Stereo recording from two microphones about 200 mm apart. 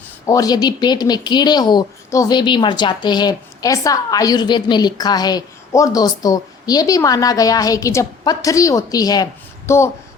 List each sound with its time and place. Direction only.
0.3 s speech: 20° left (ahead or behind)